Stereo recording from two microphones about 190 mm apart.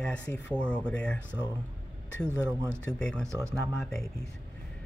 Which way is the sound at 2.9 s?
5° left (ahead or behind).